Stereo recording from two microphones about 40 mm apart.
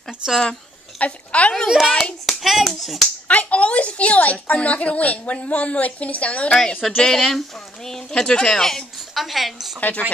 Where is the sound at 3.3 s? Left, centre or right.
Left.